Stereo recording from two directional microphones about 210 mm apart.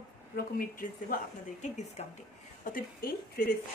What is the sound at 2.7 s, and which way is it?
Speech, 45° left (ahead or behind).